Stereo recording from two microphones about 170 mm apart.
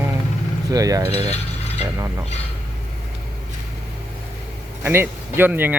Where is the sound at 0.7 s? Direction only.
20° right (ahead or behind).